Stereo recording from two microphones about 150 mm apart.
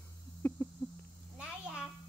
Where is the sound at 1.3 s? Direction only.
5° right (ahead or behind).